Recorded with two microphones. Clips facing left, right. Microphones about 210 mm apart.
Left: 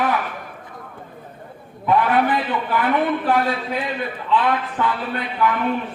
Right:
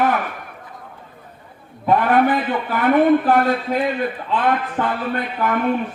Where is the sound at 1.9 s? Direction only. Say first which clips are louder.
Right 2 dB; 45° right (ahead or behind).